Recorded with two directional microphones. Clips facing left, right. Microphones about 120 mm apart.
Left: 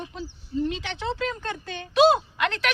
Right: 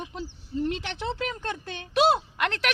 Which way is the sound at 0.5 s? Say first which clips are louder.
Left 2 dB; 20° right (ahead or behind).